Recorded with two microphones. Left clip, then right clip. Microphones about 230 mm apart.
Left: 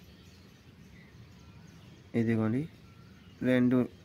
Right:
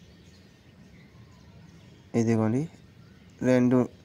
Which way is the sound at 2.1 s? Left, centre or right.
Centre.